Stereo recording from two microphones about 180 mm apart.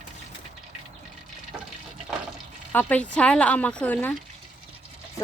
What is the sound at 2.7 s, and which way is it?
Speech, 10° left (ahead or behind).